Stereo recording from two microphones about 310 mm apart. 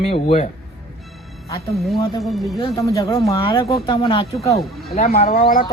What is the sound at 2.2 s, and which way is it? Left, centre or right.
Speech, centre.